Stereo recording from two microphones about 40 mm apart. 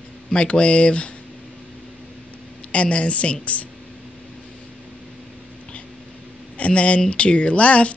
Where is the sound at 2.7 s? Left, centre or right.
Left.